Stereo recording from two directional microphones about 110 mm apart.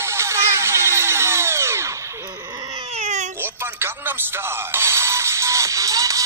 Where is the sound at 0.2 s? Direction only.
25° right (ahead or behind).